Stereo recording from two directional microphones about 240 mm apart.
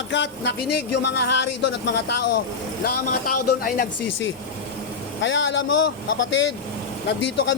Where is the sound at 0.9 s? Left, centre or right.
Left.